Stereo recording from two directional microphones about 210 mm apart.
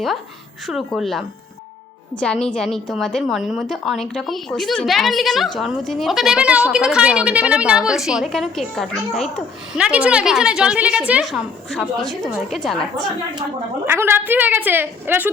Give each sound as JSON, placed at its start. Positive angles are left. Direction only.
{"t": 0.7, "sound": "a woman's voice", "side_deg": 0}
{"t": 13.8, "sound": "a woman's voice", "side_deg": -10}